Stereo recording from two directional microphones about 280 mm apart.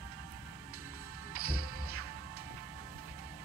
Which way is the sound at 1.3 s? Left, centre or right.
Right.